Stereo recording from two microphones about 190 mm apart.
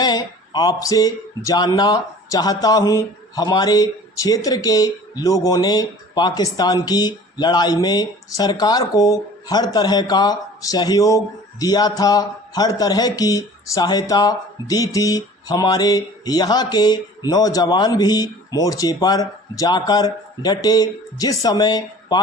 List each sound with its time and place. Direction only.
0.0 s speech: 20° left (ahead or behind)